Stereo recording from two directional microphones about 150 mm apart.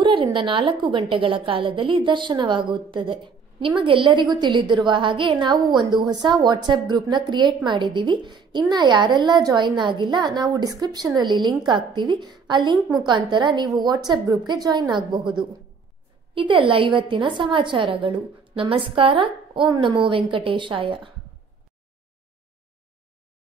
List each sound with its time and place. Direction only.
0.0 s a woman's voice: 35° right (ahead or behind)